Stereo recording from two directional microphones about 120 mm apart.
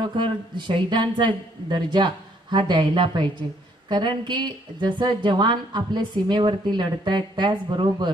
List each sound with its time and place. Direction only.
0.0 s a woman's voice: 40° right (ahead or behind)